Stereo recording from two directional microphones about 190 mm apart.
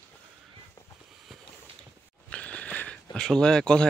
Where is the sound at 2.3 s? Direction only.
5° left (ahead or behind).